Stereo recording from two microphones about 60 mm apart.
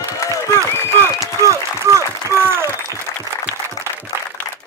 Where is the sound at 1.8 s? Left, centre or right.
Right.